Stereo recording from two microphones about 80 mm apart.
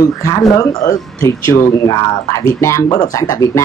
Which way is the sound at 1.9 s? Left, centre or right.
Left.